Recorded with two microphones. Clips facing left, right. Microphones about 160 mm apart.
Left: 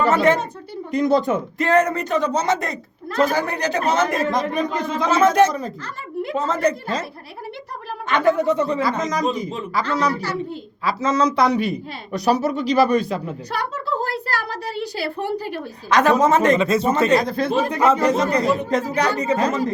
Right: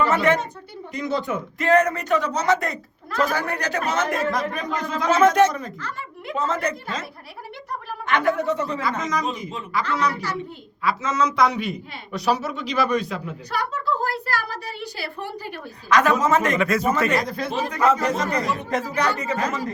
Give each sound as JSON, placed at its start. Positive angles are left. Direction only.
{"t": 0.0, "sound": "speech", "side_deg": 35}
{"t": 8.1, "sound": "speech", "side_deg": 30}